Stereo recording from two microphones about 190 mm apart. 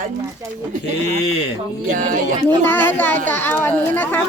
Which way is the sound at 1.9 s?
45° right (ahead or behind).